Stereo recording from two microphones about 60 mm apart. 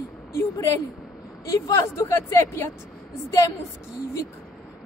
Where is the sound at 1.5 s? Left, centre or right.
Left.